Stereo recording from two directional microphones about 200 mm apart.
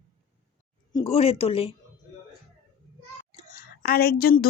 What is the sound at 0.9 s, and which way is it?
Speech, 30° left (ahead or behind).